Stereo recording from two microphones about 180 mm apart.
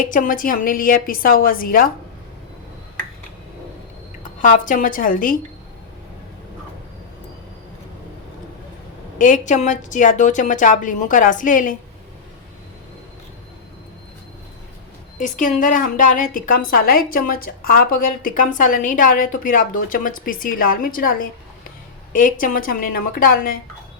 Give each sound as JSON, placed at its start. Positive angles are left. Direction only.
{"t": 0.1, "sound": "a woman's voice", "side_deg": 50}
{"t": 4.4, "sound": "a woman's voice", "side_deg": 45}
{"t": 9.1, "sound": "a woman's voice", "side_deg": 45}
{"t": 15.2, "sound": "a woman's voice", "side_deg": 45}